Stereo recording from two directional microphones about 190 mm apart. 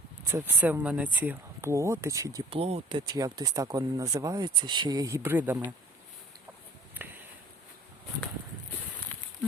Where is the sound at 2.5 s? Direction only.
30° right (ahead or behind); by 5.7 s 10° right (ahead or behind).